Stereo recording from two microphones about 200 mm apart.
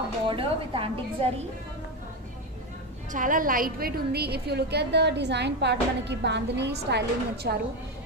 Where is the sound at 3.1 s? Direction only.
40° right (ahead or behind).